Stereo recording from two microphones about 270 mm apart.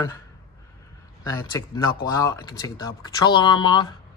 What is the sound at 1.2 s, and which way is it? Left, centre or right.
Speech, centre.